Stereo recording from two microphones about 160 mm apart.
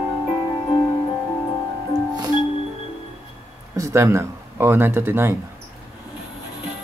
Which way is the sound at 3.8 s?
15° right (ahead or behind).